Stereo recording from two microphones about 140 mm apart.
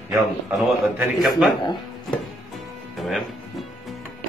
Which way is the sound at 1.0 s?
5° right (ahead or behind).